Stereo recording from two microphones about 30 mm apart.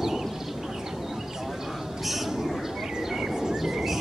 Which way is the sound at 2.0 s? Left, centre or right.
Centre.